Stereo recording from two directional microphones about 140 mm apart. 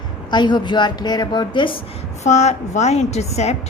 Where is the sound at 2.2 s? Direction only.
55° left (ahead or behind).